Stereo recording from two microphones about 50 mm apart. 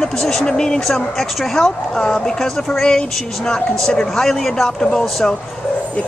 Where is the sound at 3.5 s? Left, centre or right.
Centre.